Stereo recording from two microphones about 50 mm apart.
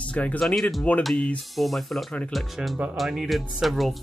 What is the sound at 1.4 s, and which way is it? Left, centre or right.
Speech, centre.